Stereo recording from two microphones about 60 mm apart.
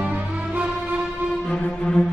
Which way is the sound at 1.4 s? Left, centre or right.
Centre.